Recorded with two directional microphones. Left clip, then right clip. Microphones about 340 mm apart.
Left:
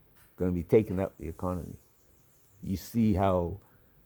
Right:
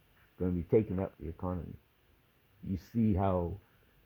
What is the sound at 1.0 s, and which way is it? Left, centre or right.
Speech, left.